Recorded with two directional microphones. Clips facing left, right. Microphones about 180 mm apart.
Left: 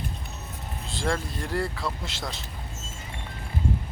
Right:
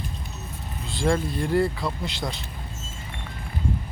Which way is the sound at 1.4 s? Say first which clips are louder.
Right 6 dB; centre (ahead or behind).